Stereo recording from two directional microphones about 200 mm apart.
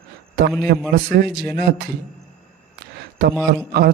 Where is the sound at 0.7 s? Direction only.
45° right (ahead or behind).